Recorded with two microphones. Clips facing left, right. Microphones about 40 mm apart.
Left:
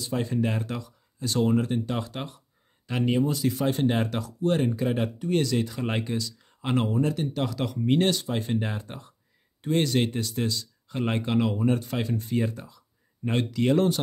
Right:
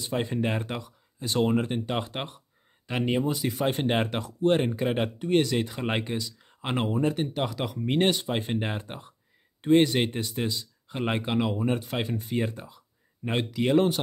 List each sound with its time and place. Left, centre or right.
0.0 s speech: right
3.6 s speech: right; by 8.0 s centre
8.0 s speech: right
12.4 s a sound: right
13.3 s speech: centre